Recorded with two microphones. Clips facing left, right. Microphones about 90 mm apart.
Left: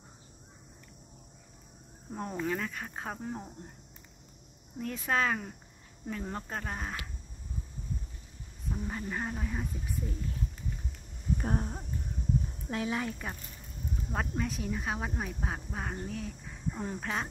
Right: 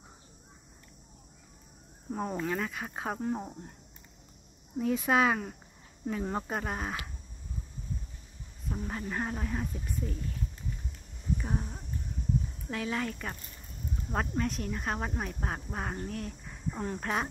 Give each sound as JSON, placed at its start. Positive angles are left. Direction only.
{"t": 2.0, "sound": "speech", "side_deg": -5}
{"t": 4.7, "sound": "speech", "side_deg": -10}
{"t": 8.6, "sound": "speech", "side_deg": 0}
{"t": 11.3, "sound": "a sound", "side_deg": 45}
{"t": 12.6, "sound": "speech", "side_deg": 25}
{"t": 14.1, "sound": "speech", "side_deg": 0}
{"t": 16.1, "sound": "a sound", "side_deg": 0}
{"t": 16.8, "sound": "speech", "side_deg": 5}